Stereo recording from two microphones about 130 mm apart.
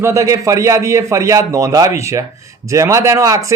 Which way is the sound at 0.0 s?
25° right (ahead or behind).